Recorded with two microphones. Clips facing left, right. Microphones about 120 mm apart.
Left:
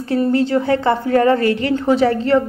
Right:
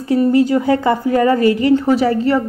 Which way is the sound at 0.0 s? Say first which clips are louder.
Right 3 dB; 10° right (ahead or behind).